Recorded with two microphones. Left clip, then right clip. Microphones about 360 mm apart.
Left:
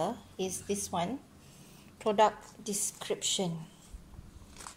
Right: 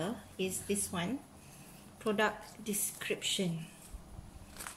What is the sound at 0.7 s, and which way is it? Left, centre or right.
Speech, centre.